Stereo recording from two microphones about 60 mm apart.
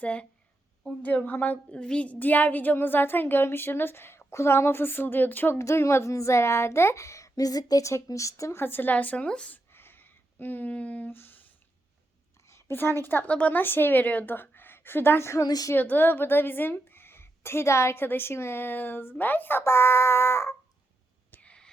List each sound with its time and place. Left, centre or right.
0.0 s a woman's voice: centre
5.5 s speech: left
8.5 s a woman's voice: left; by 9.6 s centre
9.7 s a sound: left
12.5 s a sound: left
12.7 s a woman's voice: left
13.3 s a woman's voice: left
13.6 s a woman's voice: left
15.4 s a woman's voice: left
15.7 s a woman's voice: left
19.6 s a sound: left
21.4 s whispering: centre